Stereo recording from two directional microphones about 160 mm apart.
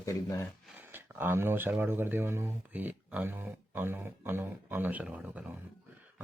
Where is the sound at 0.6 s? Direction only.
10° right (ahead or behind).